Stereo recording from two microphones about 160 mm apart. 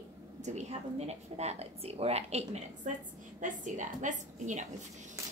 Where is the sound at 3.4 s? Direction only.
50° right (ahead or behind).